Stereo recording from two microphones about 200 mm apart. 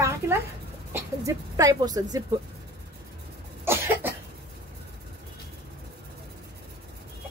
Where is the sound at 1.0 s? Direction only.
15° right (ahead or behind).